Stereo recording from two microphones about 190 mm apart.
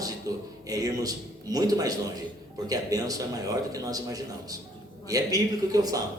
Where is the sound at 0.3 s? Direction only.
20° right (ahead or behind).